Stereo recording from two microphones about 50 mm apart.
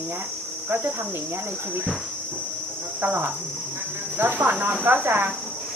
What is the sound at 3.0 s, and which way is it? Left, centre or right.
Cricket, right.